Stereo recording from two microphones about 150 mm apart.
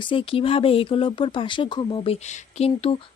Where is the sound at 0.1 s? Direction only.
35° left (ahead or behind).